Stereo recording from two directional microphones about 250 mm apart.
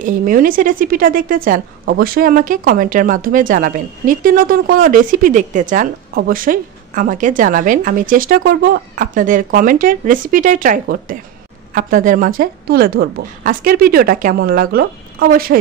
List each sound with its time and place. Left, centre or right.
0.0 s a woman's voice: right